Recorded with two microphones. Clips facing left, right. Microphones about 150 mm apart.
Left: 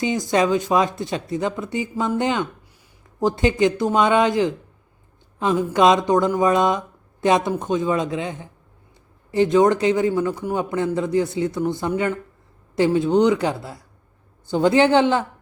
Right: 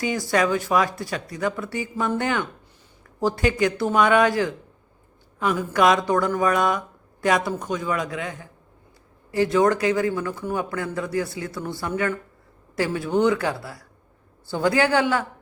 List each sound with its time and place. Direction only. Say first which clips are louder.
0.0 s speech: left 3 dB; 20° left (ahead or behind)